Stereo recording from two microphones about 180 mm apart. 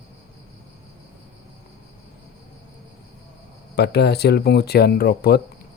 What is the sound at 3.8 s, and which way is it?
Speech, 65° left (ahead or behind).